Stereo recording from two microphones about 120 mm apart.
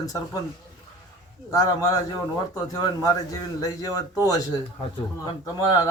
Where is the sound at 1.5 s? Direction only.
30° left (ahead or behind).